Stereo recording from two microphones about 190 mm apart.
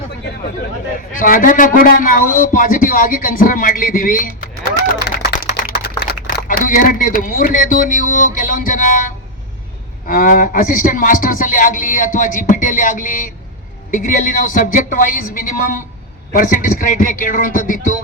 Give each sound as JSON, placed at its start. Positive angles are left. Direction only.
{"t": 1.1, "sound": "speech", "side_deg": 45}
{"t": 5.3, "sound": "a sound", "side_deg": 55}
{"t": 6.0, "sound": "speech", "side_deg": 50}